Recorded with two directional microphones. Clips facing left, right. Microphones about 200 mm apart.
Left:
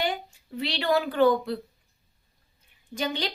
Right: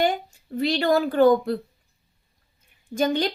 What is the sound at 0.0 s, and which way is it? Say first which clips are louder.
A woman's voice: right 6 dB; 45° right (ahead or behind).